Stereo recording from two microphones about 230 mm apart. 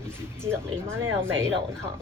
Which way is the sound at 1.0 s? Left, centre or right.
Right.